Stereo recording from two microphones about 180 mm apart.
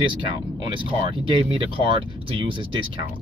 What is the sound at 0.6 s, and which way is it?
Speech, 25° right (ahead or behind).